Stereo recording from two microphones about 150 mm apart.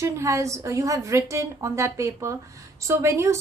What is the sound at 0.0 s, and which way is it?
Speech, 20° right (ahead or behind).